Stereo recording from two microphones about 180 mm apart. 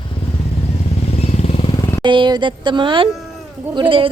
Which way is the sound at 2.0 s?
25° right (ahead or behind).